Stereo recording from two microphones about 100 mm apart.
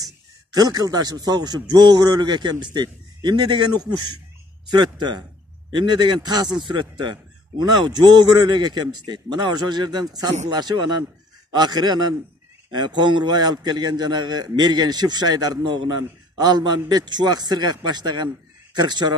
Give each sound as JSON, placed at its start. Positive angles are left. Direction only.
{"t": 0.0, "sound": "a man's voice", "side_deg": -40}